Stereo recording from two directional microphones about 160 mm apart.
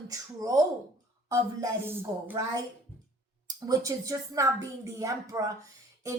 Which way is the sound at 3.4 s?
20° right (ahead or behind).